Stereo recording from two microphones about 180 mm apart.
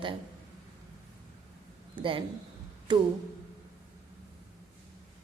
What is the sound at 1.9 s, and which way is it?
A man's voice, 25° right (ahead or behind).